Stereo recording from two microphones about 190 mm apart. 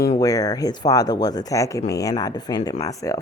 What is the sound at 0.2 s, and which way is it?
Speech, 20° left (ahead or behind).